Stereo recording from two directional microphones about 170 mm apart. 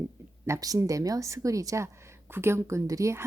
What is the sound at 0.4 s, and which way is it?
A woman's voice, 20° right (ahead or behind).